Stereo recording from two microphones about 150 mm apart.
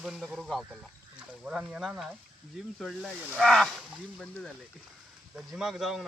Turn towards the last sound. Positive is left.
turn(degrees=0)  # may be behind; listen again after turning